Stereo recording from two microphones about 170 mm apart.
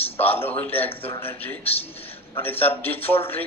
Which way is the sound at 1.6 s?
35° left (ahead or behind).